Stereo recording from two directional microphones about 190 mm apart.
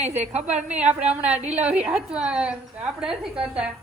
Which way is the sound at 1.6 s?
5° right (ahead or behind).